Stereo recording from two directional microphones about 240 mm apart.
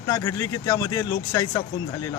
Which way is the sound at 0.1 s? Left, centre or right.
Centre.